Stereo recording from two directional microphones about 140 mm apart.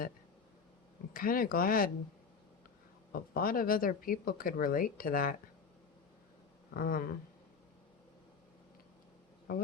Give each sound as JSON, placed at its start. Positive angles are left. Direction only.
{"t": 1.1, "sound": "speech", "side_deg": 90}
{"t": 3.1, "sound": "speech", "side_deg": 90}
{"t": 6.7, "sound": "speech", "side_deg": 90}